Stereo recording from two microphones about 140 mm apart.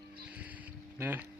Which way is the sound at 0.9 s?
15° right (ahead or behind).